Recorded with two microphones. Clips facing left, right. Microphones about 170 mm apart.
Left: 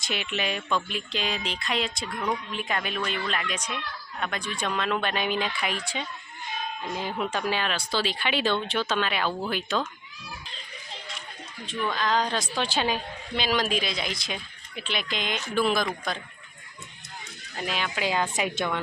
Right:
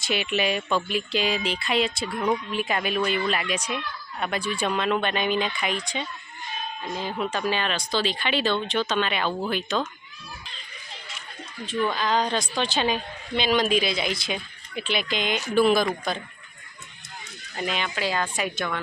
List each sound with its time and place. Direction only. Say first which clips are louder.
0.0 s a woman's voice: right 5 dB; 5° right (ahead or behind)
11.6 s a woman's voice: right 3 dB; 5° right (ahead or behind)
17.6 s a woman's voice: right 2 dB; centre (ahead or behind)
18.0 s speech: left 1 dB; 15° left (ahead or behind)